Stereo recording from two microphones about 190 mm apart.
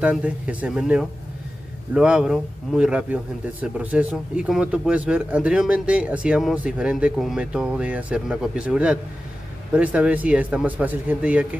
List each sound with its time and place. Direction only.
0.0 s speech: 5° right (ahead or behind)